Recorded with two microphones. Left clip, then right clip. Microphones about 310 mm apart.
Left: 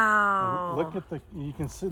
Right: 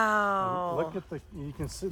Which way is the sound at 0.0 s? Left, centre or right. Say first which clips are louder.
Left 3 dB; centre.